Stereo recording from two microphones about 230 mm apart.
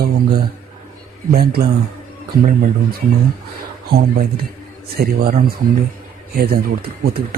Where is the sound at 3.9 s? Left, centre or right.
Right.